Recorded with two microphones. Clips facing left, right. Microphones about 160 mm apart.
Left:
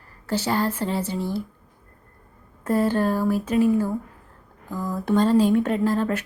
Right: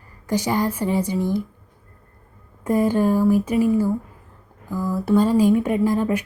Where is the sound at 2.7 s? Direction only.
15° right (ahead or behind).